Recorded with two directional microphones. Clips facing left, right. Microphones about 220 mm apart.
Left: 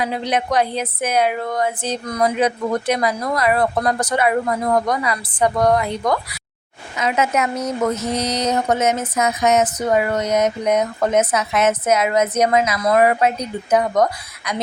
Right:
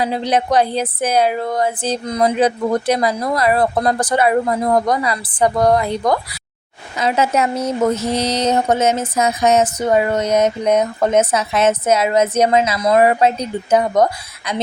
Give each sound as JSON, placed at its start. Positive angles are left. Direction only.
{"t": 0.0, "sound": "speech", "side_deg": -30}